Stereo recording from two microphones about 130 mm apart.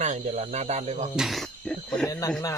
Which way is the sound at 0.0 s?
65° right (ahead or behind).